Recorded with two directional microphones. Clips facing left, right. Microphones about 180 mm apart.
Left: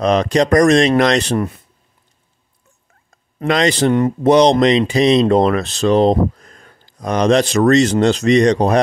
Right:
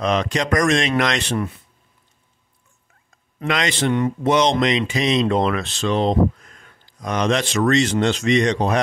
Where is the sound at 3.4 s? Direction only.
35° left (ahead or behind).